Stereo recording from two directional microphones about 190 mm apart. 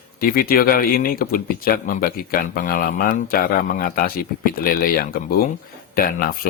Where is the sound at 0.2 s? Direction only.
50° left (ahead or behind).